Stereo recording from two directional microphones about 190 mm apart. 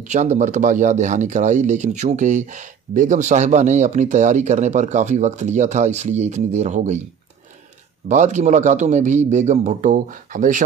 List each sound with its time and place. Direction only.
0.0 s speech: 40° right (ahead or behind)
8.1 s speech: 40° right (ahead or behind)